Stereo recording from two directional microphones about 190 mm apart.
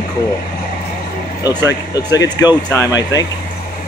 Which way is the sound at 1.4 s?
20° left (ahead or behind).